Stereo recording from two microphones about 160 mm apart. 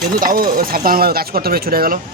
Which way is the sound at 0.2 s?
60° right (ahead or behind).